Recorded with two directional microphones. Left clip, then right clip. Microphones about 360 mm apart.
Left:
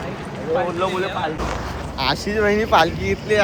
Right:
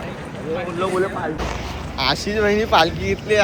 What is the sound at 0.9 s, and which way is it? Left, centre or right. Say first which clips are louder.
Speech: right 1 dB; centre.